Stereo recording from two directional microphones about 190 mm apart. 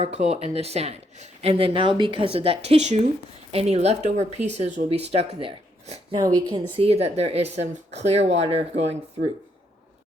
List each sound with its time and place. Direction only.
0.0 s speech: 35° right (ahead or behind)
6.1 s speech: 20° right (ahead or behind)